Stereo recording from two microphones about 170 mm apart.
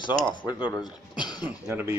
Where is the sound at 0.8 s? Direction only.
25° left (ahead or behind).